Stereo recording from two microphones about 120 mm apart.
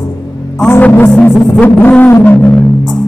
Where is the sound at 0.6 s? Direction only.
20° left (ahead or behind).